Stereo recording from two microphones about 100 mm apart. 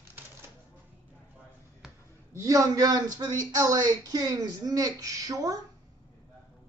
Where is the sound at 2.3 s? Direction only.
35° right (ahead or behind).